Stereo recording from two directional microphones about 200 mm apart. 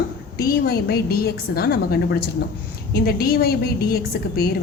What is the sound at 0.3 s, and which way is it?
A woman's voice, 50° left (ahead or behind).